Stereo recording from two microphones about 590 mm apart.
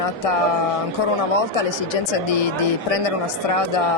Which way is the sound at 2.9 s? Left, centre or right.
Left.